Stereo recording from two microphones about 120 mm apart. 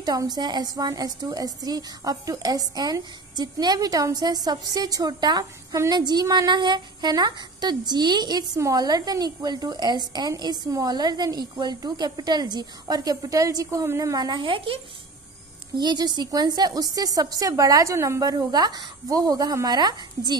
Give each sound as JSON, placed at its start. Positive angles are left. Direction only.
{"t": 0.0, "sound": "a woman's voice", "side_deg": -30}
{"t": 15.8, "sound": "a woman's voice", "side_deg": -35}